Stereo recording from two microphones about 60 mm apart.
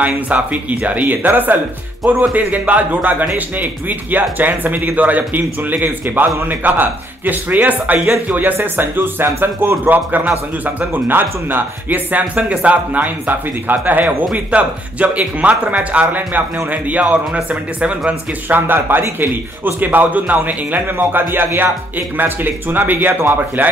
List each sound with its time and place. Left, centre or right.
0.0 s speech: right
18.5 s a man's voice: right